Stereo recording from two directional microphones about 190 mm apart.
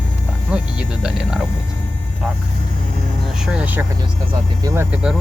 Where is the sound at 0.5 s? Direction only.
5° right (ahead or behind).